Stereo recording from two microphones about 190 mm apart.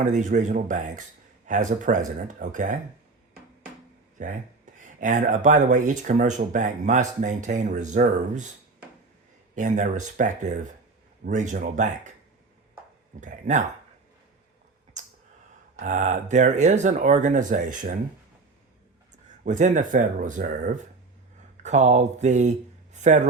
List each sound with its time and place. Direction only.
0.0 s speech: 40° right (ahead or behind)
4.2 s speech: 45° right (ahead or behind)
9.6 s speech: 40° right (ahead or behind)
13.1 s speech: 40° right (ahead or behind)
15.0 s a sound: 40° right (ahead or behind)
15.8 s speech: 40° right (ahead or behind)
19.5 s speech: 40° right (ahead or behind)